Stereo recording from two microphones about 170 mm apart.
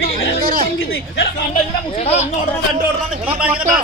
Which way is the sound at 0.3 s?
60° right (ahead or behind).